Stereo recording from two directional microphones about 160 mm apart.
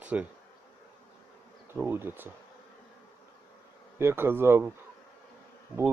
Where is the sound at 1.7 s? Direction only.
15° right (ahead or behind).